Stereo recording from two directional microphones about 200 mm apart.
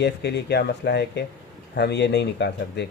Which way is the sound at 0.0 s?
55° left (ahead or behind).